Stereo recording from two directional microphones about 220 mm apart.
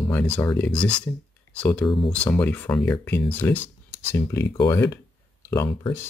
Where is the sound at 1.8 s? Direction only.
25° left (ahead or behind).